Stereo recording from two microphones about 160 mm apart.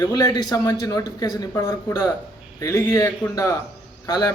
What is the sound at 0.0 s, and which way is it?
Speech, 20° left (ahead or behind).